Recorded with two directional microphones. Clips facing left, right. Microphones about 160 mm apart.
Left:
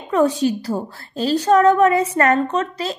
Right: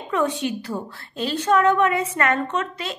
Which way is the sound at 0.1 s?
35° left (ahead or behind).